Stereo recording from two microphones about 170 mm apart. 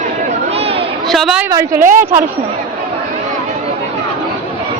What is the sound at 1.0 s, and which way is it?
Chatter, centre (ahead or behind).